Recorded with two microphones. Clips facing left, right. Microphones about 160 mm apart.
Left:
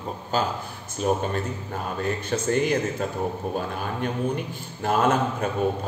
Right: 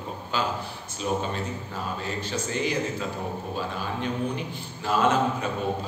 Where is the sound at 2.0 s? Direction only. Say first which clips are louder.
Left 5 dB; 55° left (ahead or behind).